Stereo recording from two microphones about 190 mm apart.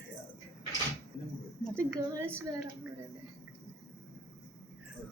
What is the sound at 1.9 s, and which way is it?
Speech, 15° right (ahead or behind).